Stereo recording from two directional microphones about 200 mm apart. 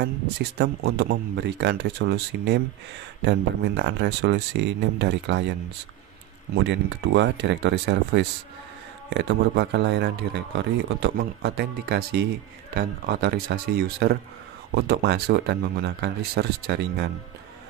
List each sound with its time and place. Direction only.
0.0 s a man's voice: 55° right (ahead or behind)